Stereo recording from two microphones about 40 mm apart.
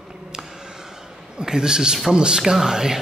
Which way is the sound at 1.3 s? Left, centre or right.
Centre.